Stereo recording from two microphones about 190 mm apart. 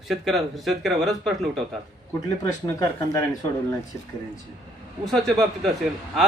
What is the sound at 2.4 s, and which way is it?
Speech, 15° left (ahead or behind).